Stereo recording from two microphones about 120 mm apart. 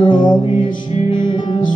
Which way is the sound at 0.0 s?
40° left (ahead or behind).